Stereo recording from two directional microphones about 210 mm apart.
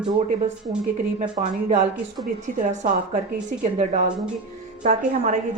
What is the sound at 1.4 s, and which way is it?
Speech, 35° right (ahead or behind).